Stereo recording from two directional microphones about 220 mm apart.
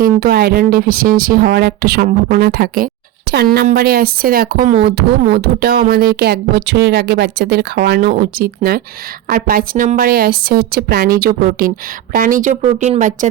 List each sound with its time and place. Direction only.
0.0 s speech: 45° right (ahead or behind)